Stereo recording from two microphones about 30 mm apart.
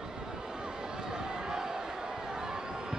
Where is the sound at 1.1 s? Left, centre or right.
Right.